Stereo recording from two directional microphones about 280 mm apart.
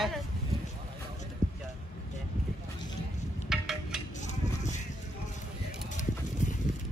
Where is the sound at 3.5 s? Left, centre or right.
Centre.